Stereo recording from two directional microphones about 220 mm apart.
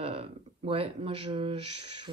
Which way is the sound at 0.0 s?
25° right (ahead or behind).